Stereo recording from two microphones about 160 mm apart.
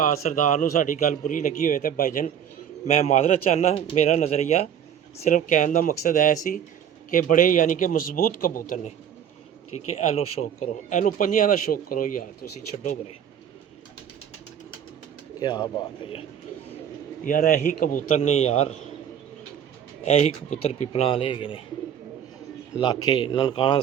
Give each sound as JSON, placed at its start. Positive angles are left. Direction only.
{"t": 0.0, "sound": "a man's voice", "side_deg": 50}
{"t": 2.8, "sound": "a man's voice", "side_deg": 40}
{"t": 9.9, "sound": "a man's voice", "side_deg": 40}
{"t": 15.4, "sound": "a man's voice", "side_deg": 25}
{"t": 17.2, "sound": "a man's voice", "side_deg": 55}
{"t": 18.2, "sound": "a man's voice", "side_deg": 40}
{"t": 20.1, "sound": "a man's voice", "side_deg": 40}
{"t": 22.8, "sound": "a man's voice", "side_deg": 30}